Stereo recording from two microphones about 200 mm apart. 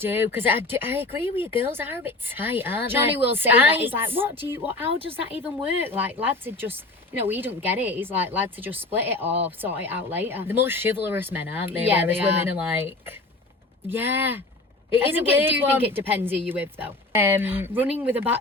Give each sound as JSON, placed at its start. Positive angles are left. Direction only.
{"t": 0.0, "sound": "speech", "side_deg": -10}
{"t": 4.9, "sound": "speech", "side_deg": -30}
{"t": 5.4, "sound": "speech", "side_deg": -10}